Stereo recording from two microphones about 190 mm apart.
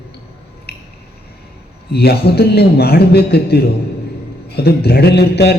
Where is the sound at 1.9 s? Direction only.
55° left (ahead or behind).